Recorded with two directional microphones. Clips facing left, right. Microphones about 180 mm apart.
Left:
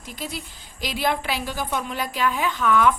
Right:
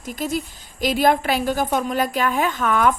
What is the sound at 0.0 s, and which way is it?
A woman's voice, 45° right (ahead or behind).